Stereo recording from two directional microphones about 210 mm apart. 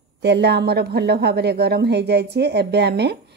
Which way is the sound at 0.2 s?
55° right (ahead or behind).